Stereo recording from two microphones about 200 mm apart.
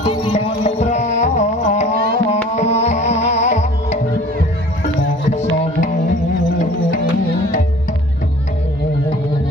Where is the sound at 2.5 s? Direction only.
35° left (ahead or behind).